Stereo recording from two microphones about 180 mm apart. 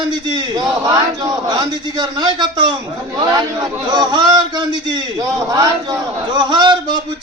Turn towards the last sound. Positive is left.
turn(degrees=-25)  # may be behind; listen again after turning